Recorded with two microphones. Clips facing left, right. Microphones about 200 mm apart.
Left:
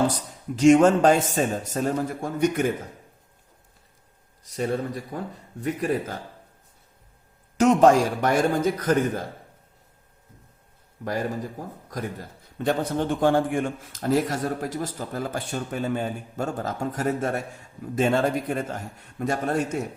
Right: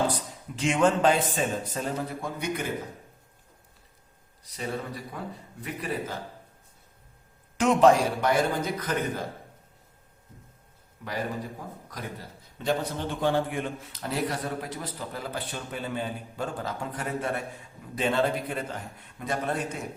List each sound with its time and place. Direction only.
0.1 s a man's voice: 40° left (ahead or behind)
4.4 s a man's voice: 45° left (ahead or behind)
7.6 s a man's voice: 45° left (ahead or behind)
11.9 s a man's voice: 50° left (ahead or behind)